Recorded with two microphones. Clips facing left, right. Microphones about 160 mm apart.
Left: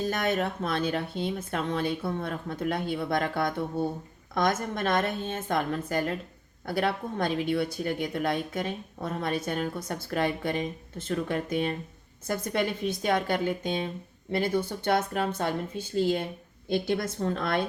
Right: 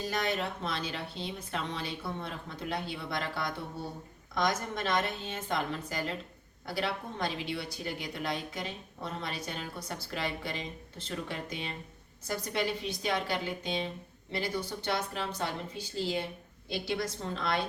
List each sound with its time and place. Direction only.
0.0 s speech: 55° left (ahead or behind)